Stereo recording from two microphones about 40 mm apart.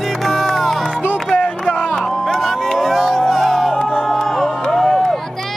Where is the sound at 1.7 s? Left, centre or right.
Left.